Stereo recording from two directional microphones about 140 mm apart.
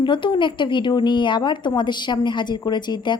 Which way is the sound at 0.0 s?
35° left (ahead or behind).